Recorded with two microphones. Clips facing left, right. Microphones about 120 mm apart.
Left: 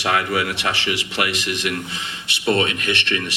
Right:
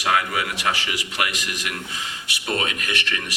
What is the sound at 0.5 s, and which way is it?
A man's voice, 25° left (ahead or behind).